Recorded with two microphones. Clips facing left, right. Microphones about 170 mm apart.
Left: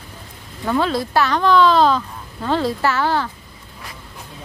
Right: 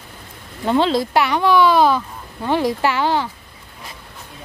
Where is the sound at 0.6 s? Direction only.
25° right (ahead or behind).